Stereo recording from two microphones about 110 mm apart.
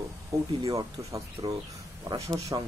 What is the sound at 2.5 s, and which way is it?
Speech, 35° right (ahead or behind).